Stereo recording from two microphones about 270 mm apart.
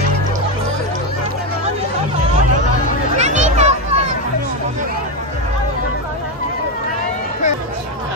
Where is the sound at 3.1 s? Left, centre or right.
Right.